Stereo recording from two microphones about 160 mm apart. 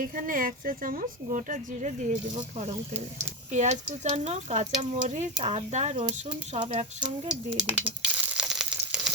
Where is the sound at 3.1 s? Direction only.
45° right (ahead or behind).